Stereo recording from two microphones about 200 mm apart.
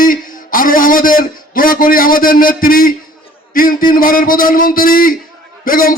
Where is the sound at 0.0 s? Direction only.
45° left (ahead or behind).